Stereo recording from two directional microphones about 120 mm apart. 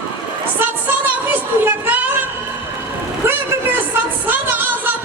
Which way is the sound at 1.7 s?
15° right (ahead or behind).